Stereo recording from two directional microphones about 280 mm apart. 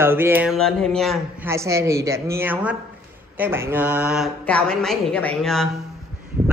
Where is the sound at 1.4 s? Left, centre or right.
Centre.